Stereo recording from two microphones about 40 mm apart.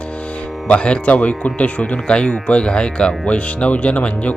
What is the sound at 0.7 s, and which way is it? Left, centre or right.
Speech, left.